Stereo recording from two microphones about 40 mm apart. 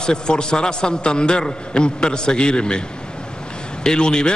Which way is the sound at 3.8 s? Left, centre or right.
Centre.